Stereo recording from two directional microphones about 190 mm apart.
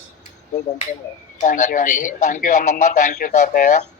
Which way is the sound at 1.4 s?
40° left (ahead or behind).